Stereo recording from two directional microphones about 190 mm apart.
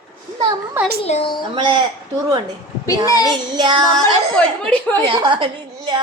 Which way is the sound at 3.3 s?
25° right (ahead or behind).